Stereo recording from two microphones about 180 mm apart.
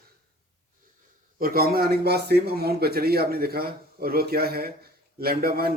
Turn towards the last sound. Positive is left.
turn(degrees=-60)  # may be behind; listen again after turning